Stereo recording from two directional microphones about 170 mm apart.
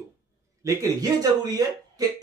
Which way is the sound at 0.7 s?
20° right (ahead or behind).